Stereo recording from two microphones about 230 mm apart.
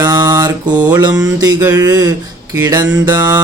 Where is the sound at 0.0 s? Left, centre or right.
Centre.